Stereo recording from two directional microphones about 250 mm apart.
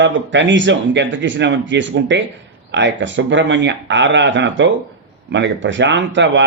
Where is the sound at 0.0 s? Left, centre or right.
Right.